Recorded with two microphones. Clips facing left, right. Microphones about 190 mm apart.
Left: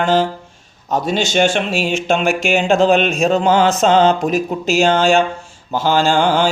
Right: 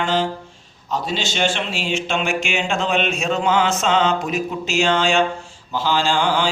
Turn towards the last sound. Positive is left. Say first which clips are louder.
# left 5 dB
turn(degrees=50)  # may be behind; listen again after turning